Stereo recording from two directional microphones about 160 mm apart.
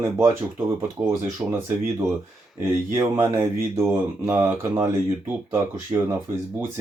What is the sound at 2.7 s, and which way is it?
Speech, 15° right (ahead or behind).